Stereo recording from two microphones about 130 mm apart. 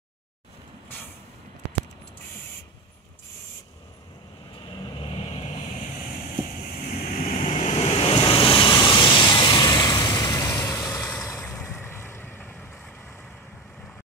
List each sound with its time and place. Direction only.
5.0 s vehicle: 40° left (ahead or behind)
7.1 s waves: 55° left (ahead or behind); by 12.7 s 15° left (ahead or behind)
12.7 s vehicle: 5° left (ahead or behind)